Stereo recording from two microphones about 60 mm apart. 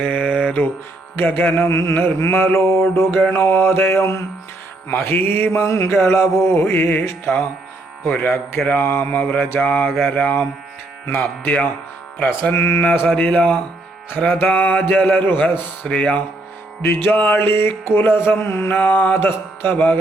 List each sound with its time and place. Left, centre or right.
0.0 s mantra: left
1.1 s speech: left
1.6 s mantra: left
2.3 s mantra: left
5.1 s speech: left
5.5 s a sound: left
6.0 s mantra: left
8.1 s speech: left
12.8 s speech: left
16.8 s mantra: left
18.8 s speech: left